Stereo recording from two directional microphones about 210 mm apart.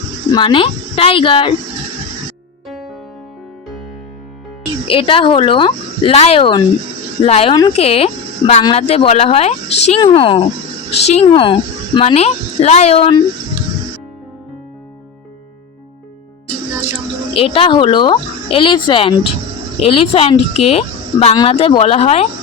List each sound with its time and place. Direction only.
0.3 s a woman's voice: 25° left (ahead or behind)
2.6 s music: centre (ahead or behind)
4.9 s a woman's voice: 25° left (ahead or behind)
17.3 s a woman's voice: 25° left (ahead or behind)